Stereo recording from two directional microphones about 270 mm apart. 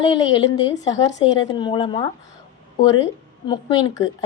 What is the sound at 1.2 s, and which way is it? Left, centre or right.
Speech, centre.